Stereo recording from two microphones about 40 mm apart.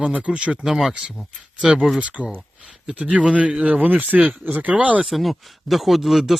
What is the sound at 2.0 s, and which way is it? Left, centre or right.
Speech, right.